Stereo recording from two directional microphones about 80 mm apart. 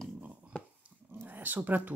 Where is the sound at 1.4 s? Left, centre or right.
Right.